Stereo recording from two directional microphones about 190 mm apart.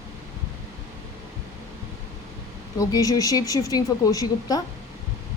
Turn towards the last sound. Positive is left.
turn(degrees=20)  # may be behind; listen again after turning